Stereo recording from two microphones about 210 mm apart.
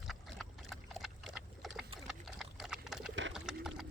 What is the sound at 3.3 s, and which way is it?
Pigeon, 5° right (ahead or behind).